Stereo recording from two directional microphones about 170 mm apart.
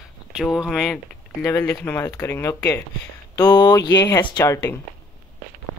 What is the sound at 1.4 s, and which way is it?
Speech, 15° left (ahead or behind).